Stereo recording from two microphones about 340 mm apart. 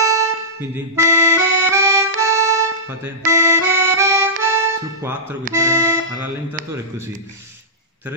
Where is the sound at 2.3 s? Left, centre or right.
Centre.